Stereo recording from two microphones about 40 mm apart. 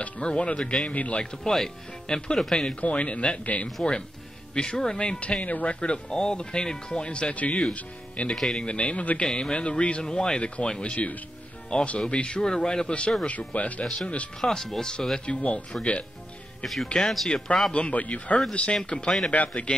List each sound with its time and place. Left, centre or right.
0.2 s speech: left
1.2 s speech: left
2.7 s speech: left
4.6 s speech: centre
5.4 s speech: left
5.8 s speech: left
7.3 s speech: left
9.2 s speech: centre
14.4 s speech: centre
15.4 s speech: left
16.6 s speech: centre
17.5 s speech: left
19.3 s speech: left